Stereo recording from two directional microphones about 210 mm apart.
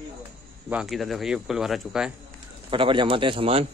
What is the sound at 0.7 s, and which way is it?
Speech, centre (ahead or behind).